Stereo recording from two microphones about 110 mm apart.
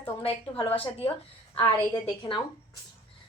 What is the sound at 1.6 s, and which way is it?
Speech, 40° left (ahead or behind).